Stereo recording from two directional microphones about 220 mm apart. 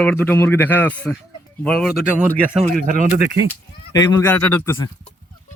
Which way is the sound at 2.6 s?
35° right (ahead or behind).